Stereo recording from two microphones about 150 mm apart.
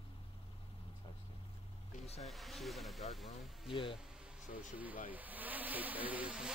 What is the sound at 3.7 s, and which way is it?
Speech, 35° left (ahead or behind).